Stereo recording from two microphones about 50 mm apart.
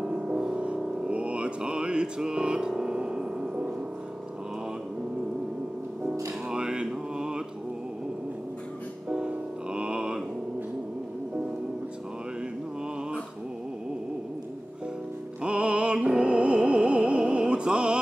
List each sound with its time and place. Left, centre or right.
0.0 s music: centre
6.5 s mantra: centre
9.1 s music: centre
15.4 s music: right